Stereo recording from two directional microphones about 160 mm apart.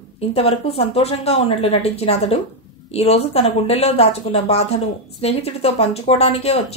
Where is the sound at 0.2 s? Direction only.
40° left (ahead or behind).